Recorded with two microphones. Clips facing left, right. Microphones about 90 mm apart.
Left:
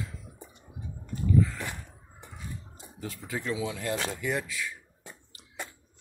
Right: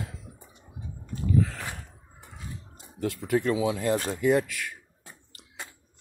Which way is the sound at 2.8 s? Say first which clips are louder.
Right 12 dB; 65° right (ahead or behind).